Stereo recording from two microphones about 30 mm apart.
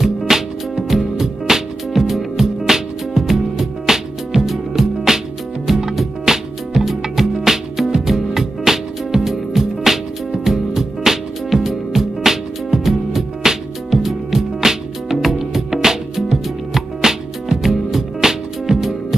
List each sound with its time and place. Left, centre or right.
0.0 s music: centre
13.4 s music: right
13.8 s music: centre
17.0 s music: centre